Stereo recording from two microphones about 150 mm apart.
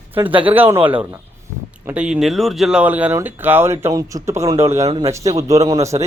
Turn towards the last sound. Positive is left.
turn(degrees=-20)  # may be behind; listen again after turning